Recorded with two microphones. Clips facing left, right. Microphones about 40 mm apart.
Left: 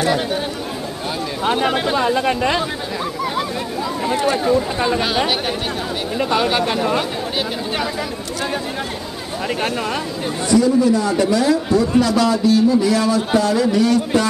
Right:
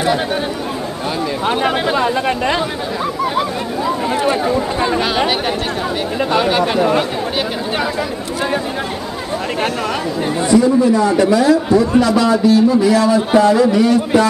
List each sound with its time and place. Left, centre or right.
1.4 s a man's voice: centre
4.1 s a man's voice: centre
10.5 s a man's voice: right
11.1 s a man's voice: centre